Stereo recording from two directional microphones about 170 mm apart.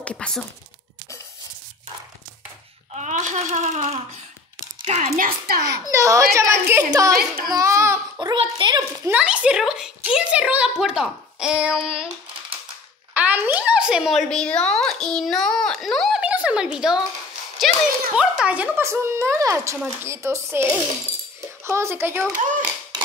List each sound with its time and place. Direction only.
0.0 s speech: 5° left (ahead or behind)
2.9 s speech: 45° right (ahead or behind)
5.1 s a child's voice: 55° right (ahead or behind)
5.7 s a child's voice: 20° right (ahead or behind)
7.2 s a child's voice: 60° right (ahead or behind)
7.5 s a child's voice: 15° right (ahead or behind)
9.1 s a woman's voice: 5° right (ahead or behind)
13.1 s speech: 10° right (ahead or behind)
17.6 s a sound: centre (ahead or behind)
18.1 s speech: 5° right (ahead or behind)
21.6 s speech: 15° right (ahead or behind)
22.3 s speech: 50° right (ahead or behind)